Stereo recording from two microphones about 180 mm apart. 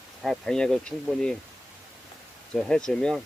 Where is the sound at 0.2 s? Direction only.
Centre (ahead or behind).